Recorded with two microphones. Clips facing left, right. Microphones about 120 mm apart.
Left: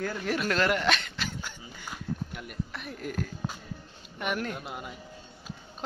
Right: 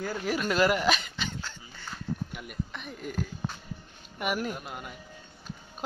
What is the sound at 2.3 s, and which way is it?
Speech, centre (ahead or behind).